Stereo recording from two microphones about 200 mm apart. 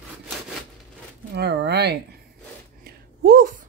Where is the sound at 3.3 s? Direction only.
45° right (ahead or behind).